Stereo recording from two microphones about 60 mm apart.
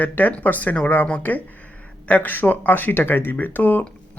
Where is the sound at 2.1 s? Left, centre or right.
Left.